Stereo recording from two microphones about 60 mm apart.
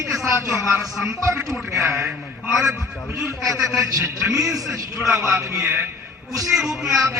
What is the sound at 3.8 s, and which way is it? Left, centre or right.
A man's voice, right.